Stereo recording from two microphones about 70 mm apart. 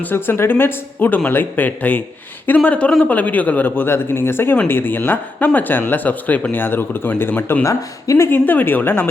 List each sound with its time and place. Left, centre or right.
0.0 s speech: left
7.6 s speech: left
8.3 s speech: left